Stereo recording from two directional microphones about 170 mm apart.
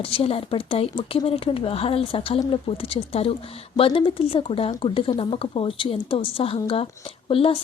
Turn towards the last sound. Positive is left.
turn(degrees=30)  # may be behind; listen again after turning